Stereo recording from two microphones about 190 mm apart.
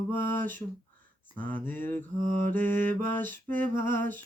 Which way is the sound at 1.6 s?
10° left (ahead or behind).